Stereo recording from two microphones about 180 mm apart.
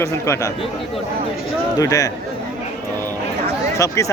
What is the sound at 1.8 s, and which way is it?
Speech, 20° left (ahead or behind).